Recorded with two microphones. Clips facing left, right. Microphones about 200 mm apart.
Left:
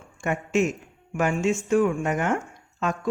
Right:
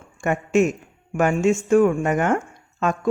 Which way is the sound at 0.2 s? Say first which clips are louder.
Right 5 dB; 50° right (ahead or behind).